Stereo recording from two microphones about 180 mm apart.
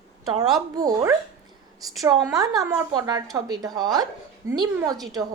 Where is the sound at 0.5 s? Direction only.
20° right (ahead or behind).